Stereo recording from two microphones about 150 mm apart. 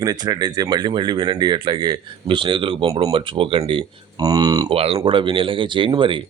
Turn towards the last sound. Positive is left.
turn(degrees=-35)  # may be behind; listen again after turning